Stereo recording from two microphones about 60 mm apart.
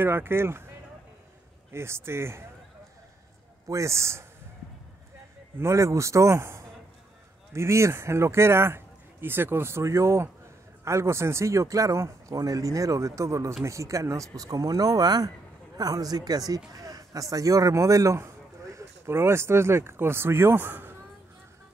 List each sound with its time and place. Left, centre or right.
0.0 s speech: right
3.6 s speech: right
5.6 s speech: right